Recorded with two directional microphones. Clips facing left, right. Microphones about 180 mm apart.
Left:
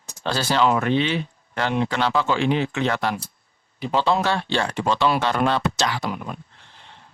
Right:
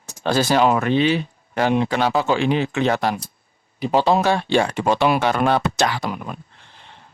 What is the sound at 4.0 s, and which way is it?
Speech, 45° right (ahead or behind).